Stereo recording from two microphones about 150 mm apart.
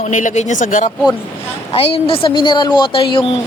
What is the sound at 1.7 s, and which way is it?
A woman's voice, 40° left (ahead or behind).